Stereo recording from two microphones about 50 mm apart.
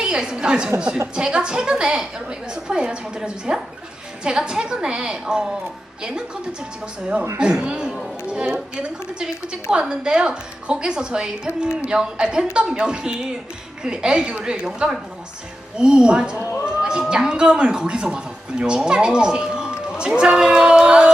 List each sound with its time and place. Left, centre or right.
0.0 s a woman's voice: centre
15.8 s a woman's voice: centre